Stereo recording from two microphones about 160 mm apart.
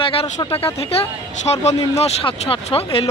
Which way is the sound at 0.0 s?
35° left (ahead or behind).